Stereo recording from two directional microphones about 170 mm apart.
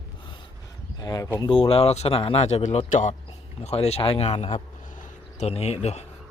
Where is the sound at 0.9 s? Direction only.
25° left (ahead or behind); by 6.1 s 40° left (ahead or behind).